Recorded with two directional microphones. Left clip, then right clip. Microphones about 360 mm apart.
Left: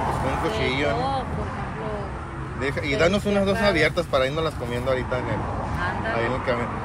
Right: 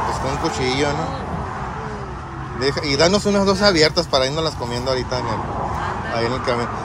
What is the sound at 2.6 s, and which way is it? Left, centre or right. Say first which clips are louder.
Speech: right 5 dB; centre.